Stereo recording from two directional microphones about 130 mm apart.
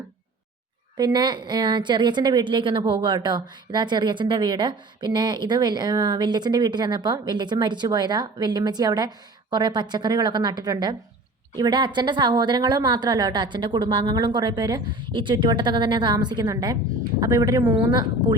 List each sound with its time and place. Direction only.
0.9 s a woman's voice: 35° right (ahead or behind)